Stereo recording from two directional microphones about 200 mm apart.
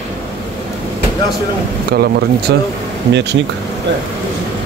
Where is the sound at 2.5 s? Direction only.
55° right (ahead or behind).